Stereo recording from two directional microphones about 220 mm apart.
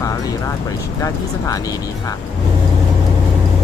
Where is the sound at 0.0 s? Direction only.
15° left (ahead or behind).